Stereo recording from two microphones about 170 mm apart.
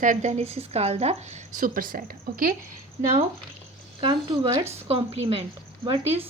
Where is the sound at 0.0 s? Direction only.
45° right (ahead or behind).